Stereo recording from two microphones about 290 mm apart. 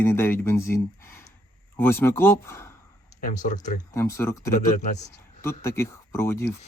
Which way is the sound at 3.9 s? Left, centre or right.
Centre.